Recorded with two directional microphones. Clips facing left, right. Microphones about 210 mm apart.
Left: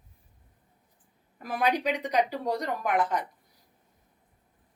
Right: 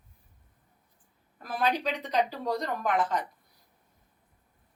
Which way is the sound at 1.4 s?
15° left (ahead or behind).